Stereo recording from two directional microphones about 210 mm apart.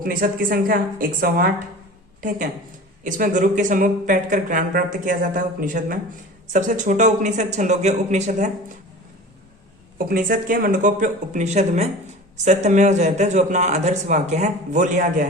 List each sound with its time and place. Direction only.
0.0 s speech: 45° right (ahead or behind)
3.0 s speech: 40° right (ahead or behind)
10.0 s speech: 45° right (ahead or behind)